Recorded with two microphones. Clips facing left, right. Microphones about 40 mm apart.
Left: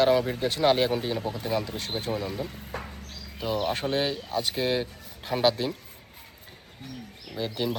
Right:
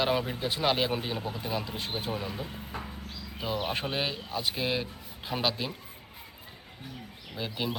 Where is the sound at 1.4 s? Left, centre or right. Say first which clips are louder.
Left 6 dB; left.